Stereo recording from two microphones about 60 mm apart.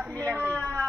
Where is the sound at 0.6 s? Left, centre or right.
Left.